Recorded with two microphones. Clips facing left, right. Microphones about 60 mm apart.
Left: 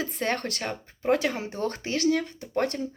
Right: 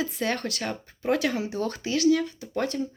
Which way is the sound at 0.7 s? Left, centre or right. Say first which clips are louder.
Left 2 dB; left.